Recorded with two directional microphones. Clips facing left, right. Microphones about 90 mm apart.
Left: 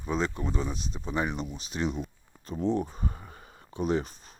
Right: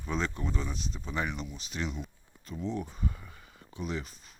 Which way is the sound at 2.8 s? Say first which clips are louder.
Left 3 dB; 35° left (ahead or behind).